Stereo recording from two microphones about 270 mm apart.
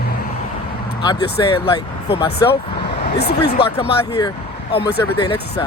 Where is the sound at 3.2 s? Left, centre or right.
Left.